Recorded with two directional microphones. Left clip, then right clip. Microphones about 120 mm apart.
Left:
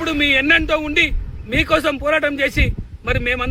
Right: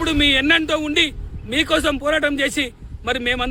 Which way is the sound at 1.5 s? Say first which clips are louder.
Left 2 dB; 55° right (ahead or behind).